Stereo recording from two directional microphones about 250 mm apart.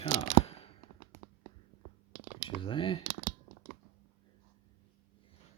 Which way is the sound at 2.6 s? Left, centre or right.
Centre.